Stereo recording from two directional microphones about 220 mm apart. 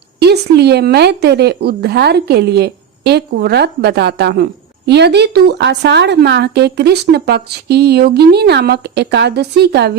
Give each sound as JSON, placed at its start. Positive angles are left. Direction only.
{"t": 0.2, "sound": "a woman's voice", "side_deg": -50}